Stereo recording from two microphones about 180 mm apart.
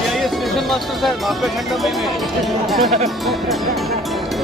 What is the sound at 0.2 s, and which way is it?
Music, centre (ahead or behind).